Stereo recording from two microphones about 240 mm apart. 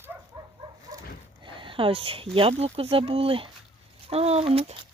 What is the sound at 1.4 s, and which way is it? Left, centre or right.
Speech, right.